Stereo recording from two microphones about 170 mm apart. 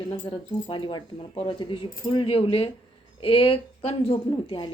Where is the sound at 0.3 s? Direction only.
30° left (ahead or behind).